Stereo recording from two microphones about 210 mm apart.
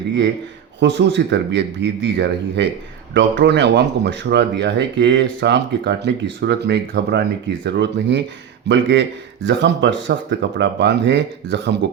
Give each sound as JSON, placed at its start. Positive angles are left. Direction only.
{"t": 0.8, "sound": "speech", "side_deg": -55}